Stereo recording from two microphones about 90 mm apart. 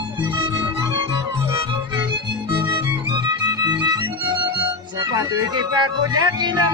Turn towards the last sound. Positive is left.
turn(degrees=-55)  # may be behind; listen again after turning